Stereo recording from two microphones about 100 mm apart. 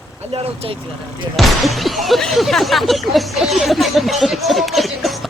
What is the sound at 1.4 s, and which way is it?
Speech, centre (ahead or behind).